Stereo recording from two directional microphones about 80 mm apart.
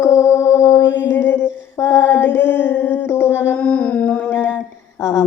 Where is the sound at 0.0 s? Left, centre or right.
Left.